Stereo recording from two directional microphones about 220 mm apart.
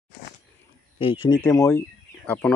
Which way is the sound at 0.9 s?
25° left (ahead or behind).